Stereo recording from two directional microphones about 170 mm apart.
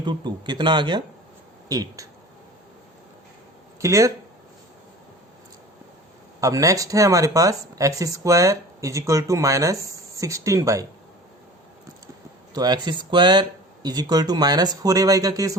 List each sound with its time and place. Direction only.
0.0 s speech: 25° right (ahead or behind)
3.8 s speech: 20° right (ahead or behind)
6.4 s speech: 20° right (ahead or behind)
12.5 s speech: 25° right (ahead or behind)